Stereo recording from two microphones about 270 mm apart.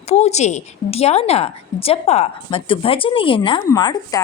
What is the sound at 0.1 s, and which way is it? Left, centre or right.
A woman's voice, left.